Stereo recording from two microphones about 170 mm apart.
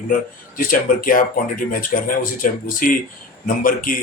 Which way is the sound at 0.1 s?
55° left (ahead or behind).